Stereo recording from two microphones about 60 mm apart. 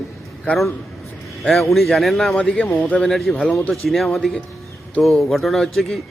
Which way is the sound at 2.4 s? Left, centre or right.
Centre.